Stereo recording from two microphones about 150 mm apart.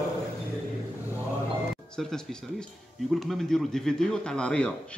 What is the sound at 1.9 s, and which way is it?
Speech, 5° left (ahead or behind).